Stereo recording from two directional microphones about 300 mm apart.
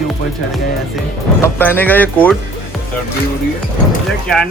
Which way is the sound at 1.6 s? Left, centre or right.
Centre.